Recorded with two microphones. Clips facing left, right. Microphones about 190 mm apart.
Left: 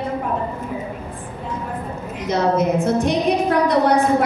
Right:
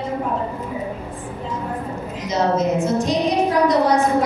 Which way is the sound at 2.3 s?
60° left (ahead or behind).